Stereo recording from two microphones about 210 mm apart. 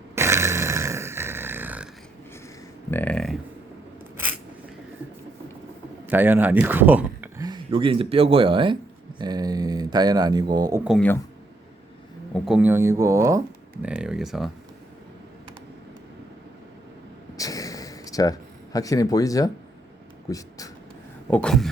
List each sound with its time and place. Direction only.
0.2 s a sound: 10° right (ahead or behind)
2.9 s a sound: 5° left (ahead or behind)
6.1 s speech: 10° right (ahead or behind)
7.4 s speech: 20° right (ahead or behind)
10.8 s speech: centre (ahead or behind)
12.3 s speech: 5° right (ahead or behind)
17.3 s a sound: 15° left (ahead or behind)
20.3 s speech: 15° left (ahead or behind)
21.2 s speech: 5° left (ahead or behind)